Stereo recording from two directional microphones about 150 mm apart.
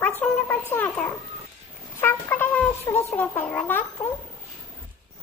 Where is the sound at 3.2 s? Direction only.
10° left (ahead or behind).